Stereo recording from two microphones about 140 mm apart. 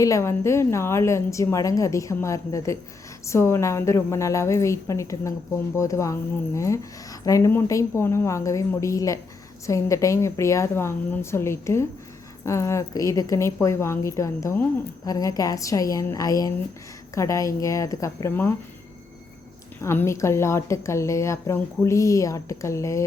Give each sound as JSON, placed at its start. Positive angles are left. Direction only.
{"t": 0.0, "sound": "a woman's voice", "side_deg": 20}
{"t": 19.8, "sound": "a woman's voice", "side_deg": 20}